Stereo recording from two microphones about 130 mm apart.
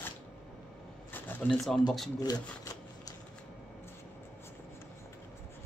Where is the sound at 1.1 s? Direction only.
5° left (ahead or behind).